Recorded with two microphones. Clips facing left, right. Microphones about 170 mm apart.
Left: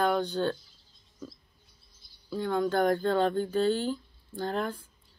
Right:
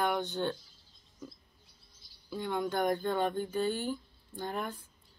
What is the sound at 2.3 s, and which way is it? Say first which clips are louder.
Speech: left 5 dB; 20° right (ahead or behind).